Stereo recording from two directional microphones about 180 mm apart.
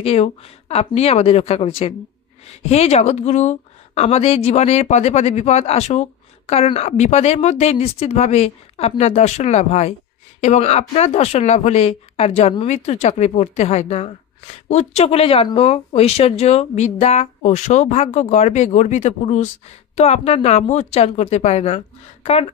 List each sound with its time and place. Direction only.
0.0 s speech: 35° left (ahead or behind)